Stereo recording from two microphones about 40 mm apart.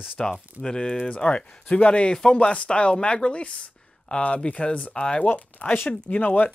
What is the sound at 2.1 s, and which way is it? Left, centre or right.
Speech, left.